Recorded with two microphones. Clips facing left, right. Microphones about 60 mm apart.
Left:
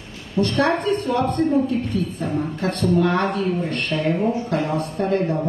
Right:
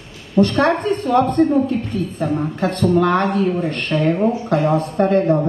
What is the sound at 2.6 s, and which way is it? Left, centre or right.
Speech, right.